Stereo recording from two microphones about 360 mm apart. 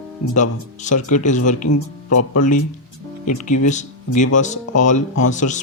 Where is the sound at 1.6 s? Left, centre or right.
Left.